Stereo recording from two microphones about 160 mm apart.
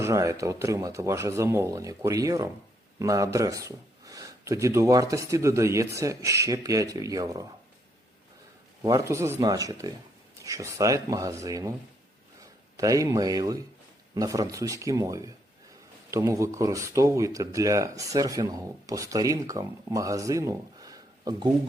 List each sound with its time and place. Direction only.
0.0 s speech: 20° right (ahead or behind)
8.8 s speech: 20° right (ahead or behind)
12.7 s speech: 20° right (ahead or behind)